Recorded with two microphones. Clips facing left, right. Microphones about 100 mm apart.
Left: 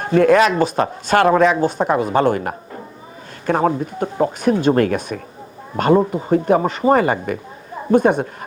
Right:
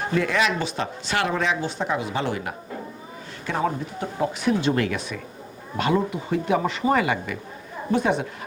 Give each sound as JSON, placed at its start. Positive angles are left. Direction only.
{"t": 0.0, "sound": "speech", "side_deg": 50}